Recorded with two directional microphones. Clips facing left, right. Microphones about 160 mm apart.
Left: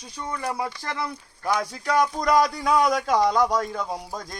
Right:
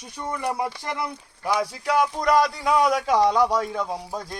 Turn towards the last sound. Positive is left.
turn(degrees=-5)  # may be behind; listen again after turning